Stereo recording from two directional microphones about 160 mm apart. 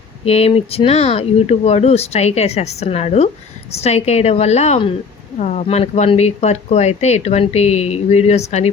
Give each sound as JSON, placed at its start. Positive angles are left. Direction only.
{"t": 0.3, "sound": "speech", "side_deg": 40}